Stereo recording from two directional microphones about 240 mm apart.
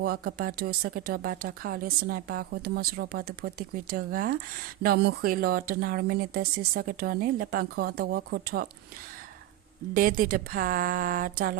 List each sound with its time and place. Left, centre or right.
0.0 s speech: right
9.9 s speech: right